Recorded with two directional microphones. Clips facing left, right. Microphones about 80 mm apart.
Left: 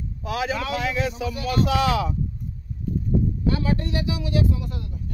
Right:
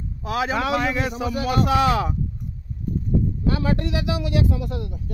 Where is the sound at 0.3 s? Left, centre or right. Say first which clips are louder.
Right 4 dB; right.